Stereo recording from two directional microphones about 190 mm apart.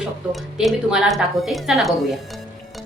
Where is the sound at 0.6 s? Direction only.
Centre (ahead or behind).